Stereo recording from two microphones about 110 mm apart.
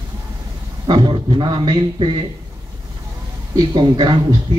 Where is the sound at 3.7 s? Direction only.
45° right (ahead or behind).